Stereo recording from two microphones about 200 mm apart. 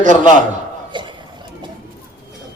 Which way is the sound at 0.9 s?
25° right (ahead or behind).